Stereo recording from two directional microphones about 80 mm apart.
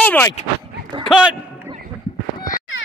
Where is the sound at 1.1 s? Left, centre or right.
Centre.